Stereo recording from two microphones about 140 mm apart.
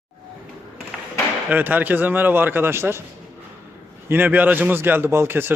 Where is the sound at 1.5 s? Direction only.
15° right (ahead or behind).